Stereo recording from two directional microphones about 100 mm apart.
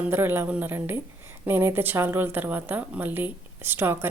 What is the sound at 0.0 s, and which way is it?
A woman's voice, 20° right (ahead or behind).